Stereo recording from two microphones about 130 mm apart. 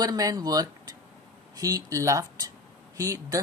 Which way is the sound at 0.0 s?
30° right (ahead or behind).